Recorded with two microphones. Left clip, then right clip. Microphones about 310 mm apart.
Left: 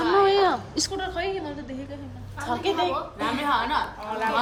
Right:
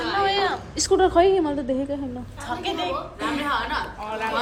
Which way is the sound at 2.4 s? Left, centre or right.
Left.